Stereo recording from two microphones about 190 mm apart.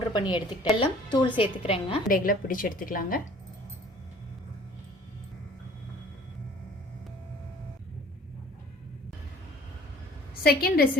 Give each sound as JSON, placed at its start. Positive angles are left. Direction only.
{"t": 0.1, "sound": "a woman's voice", "side_deg": 25}
{"t": 2.0, "sound": "a woman's voice", "side_deg": 50}
{"t": 10.4, "sound": "a woman's voice", "side_deg": 50}